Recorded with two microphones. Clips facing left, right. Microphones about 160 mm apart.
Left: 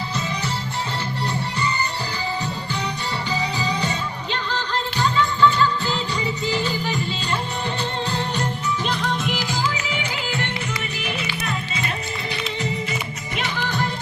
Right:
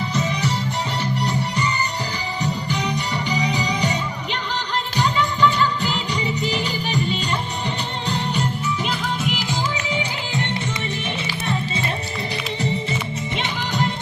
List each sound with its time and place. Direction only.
1.2 s music: 15° right (ahead or behind)
8.8 s music: 5° right (ahead or behind)
9.3 s music: 20° right (ahead or behind)
13.3 s music: 20° right (ahead or behind)